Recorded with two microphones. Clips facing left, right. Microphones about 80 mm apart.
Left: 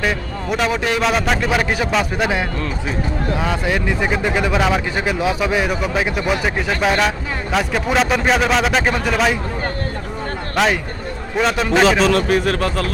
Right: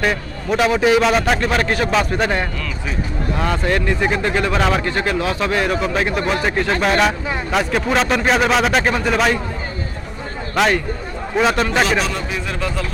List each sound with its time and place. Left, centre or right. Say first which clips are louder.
0.0 s a man's voice: right 1 dB; centre
10.5 s a man's voice: right 1 dB; centre
12.3 s speech: left 7 dB; left